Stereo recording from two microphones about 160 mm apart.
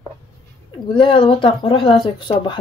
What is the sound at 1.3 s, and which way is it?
Speech, 35° left (ahead or behind).